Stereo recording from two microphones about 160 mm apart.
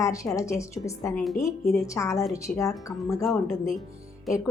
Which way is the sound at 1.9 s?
20° left (ahead or behind).